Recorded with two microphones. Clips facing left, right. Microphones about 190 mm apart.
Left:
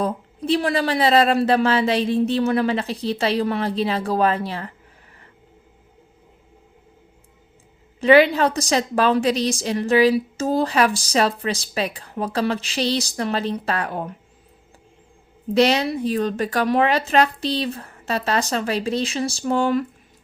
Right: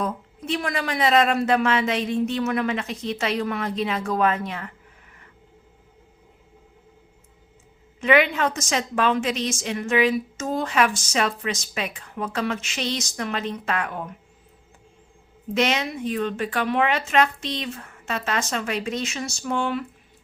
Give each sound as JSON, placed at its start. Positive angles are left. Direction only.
{"t": 0.0, "sound": "a woman's voice", "side_deg": 35}
{"t": 8.0, "sound": "a woman's voice", "side_deg": 35}
{"t": 15.5, "sound": "a woman's voice", "side_deg": 35}